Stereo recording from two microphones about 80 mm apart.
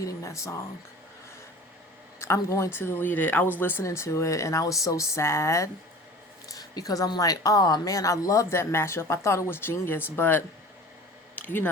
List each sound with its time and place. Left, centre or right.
0.0 s speech: left
2.2 s speech: left
6.5 s speech: left
11.3 s a sound: left